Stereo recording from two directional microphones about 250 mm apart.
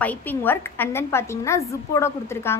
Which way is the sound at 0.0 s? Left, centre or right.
Centre.